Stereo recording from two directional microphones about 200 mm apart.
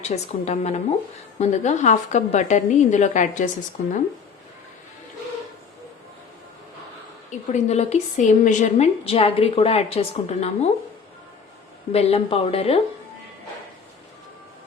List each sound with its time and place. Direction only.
0.1 s a woman's voice: 35° left (ahead or behind)
7.3 s a woman's voice: 35° left (ahead or behind)
11.9 s speech: 30° left (ahead or behind)